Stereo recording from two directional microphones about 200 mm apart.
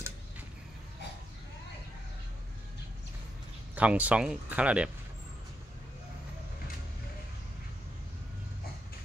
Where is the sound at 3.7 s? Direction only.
5° right (ahead or behind).